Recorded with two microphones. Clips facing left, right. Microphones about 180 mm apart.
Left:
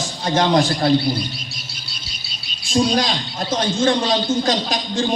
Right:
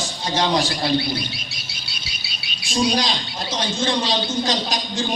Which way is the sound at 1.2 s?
70° right (ahead or behind).